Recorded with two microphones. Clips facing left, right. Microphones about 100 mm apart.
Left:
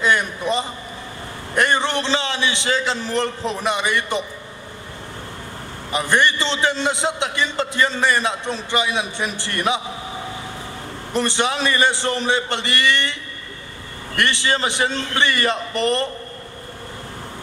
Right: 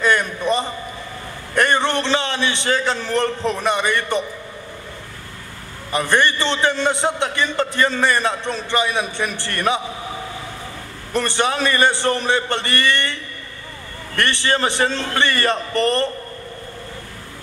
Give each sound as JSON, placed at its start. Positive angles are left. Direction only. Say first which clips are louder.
{"t": 0.0, "sound": "a sound", "louder": "right 1 dB", "side_deg": 20}
{"t": 2.0, "sound": "a man's voice", "louder": "right 1 dB", "side_deg": 15}
{"t": 3.0, "sound": "a man's voice", "louder": "right 2 dB", "side_deg": -60}
{"t": 3.4, "sound": "a man's voice", "louder": "right 2 dB", "side_deg": 15}
{"t": 5.9, "sound": "a man's voice", "louder": "right 1 dB", "side_deg": 20}
{"t": 11.1, "sound": "a man's voice", "louder": "right 1 dB", "side_deg": 20}